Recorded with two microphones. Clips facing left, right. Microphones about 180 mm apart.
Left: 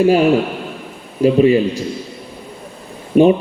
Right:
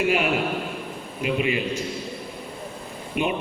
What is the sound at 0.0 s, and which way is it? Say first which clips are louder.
A man's voice: left 10 dB; 35° left (ahead or behind).